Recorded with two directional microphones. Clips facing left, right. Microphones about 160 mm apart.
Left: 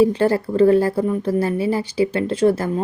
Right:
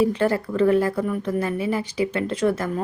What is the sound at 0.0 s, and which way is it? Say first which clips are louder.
A woman's voice: left 4 dB; 30° left (ahead or behind).